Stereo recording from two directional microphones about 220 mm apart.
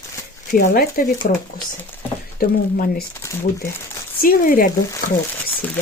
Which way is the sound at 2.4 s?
40° left (ahead or behind).